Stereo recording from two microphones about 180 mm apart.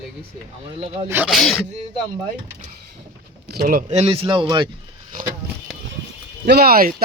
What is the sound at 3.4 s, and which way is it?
Speech, 60° right (ahead or behind).